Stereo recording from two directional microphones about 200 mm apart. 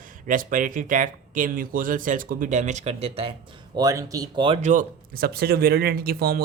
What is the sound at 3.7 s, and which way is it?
Speech, 15° right (ahead or behind).